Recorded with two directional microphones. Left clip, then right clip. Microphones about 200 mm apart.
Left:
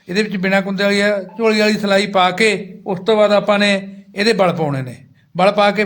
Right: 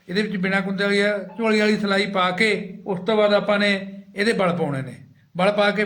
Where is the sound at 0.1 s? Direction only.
55° left (ahead or behind).